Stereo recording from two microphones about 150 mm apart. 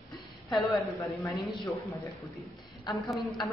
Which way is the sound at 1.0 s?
20° left (ahead or behind).